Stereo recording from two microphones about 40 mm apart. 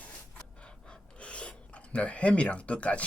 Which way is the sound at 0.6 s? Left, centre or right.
Left.